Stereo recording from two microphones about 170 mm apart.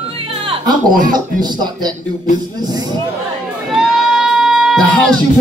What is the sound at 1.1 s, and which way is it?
Speech, 25° right (ahead or behind).